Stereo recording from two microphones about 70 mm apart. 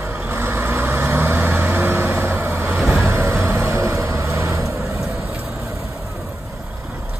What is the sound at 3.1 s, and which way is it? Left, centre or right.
Vehicle, right.